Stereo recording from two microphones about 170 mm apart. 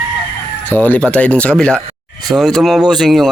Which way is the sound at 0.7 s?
10° left (ahead or behind).